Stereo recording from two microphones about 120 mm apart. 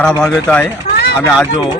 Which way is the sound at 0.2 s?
5° left (ahead or behind).